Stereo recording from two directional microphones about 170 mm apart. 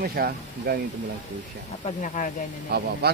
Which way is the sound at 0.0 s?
60° right (ahead or behind).